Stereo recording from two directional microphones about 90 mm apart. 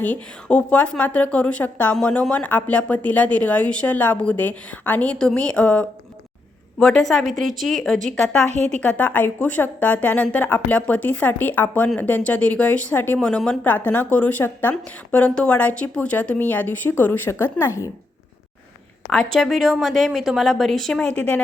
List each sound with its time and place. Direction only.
0.0 s a woman's voice: 15° left (ahead or behind)
13.1 s speech: 10° left (ahead or behind); by 17.9 s 30° left (ahead or behind)
19.1 s a woman's voice: 5° left (ahead or behind)